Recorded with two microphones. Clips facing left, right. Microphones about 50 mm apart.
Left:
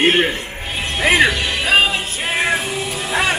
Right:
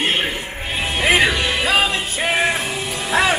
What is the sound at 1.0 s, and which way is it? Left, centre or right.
Speech, centre.